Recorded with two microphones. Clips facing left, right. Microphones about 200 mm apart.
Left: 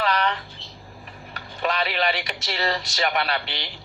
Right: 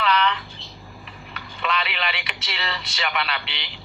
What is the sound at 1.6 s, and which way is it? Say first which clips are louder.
A man's voice: left 3 dB; 45° left (ahead or behind).